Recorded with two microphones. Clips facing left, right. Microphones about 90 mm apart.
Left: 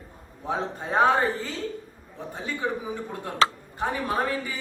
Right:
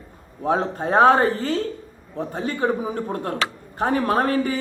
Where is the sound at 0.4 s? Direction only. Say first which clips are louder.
Right 7 dB; 60° right (ahead or behind).